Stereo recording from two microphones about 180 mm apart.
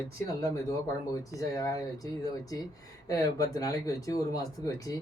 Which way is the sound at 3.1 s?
20° left (ahead or behind).